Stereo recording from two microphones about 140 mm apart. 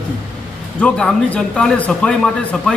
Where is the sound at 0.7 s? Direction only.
5° left (ahead or behind).